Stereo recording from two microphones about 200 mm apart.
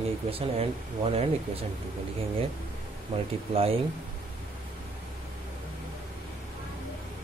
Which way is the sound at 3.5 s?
30° right (ahead or behind).